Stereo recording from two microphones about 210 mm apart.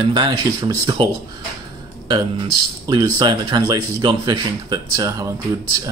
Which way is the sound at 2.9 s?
20° right (ahead or behind).